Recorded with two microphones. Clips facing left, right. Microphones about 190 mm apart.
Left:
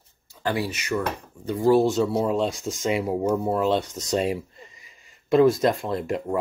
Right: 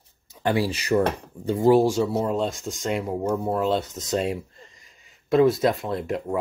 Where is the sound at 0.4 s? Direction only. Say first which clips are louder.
Right 3 dB; 25° right (ahead or behind).